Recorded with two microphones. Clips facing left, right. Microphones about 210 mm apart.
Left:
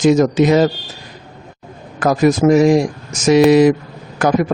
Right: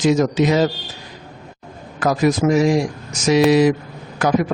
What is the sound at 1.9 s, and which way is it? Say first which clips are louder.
A man's voice: left 4 dB; 50° left (ahead or behind).